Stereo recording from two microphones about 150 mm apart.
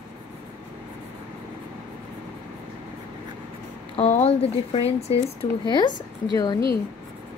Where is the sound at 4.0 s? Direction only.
45° left (ahead or behind).